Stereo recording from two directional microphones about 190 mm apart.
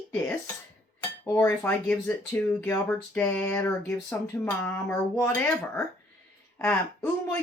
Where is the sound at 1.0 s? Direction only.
10° left (ahead or behind).